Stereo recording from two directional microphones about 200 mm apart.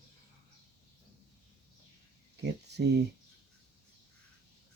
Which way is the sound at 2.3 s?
60° right (ahead or behind).